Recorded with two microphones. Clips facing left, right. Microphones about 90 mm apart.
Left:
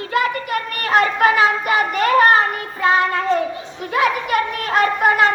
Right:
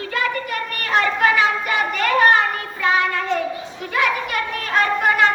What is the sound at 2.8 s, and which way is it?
Child singing, 35° left (ahead or behind).